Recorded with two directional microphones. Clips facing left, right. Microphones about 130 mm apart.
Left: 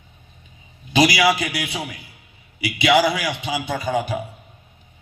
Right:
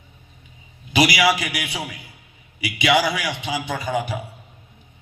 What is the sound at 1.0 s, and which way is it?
Speech, 15° left (ahead or behind).